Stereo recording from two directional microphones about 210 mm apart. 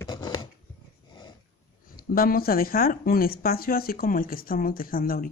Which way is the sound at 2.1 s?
45° left (ahead or behind).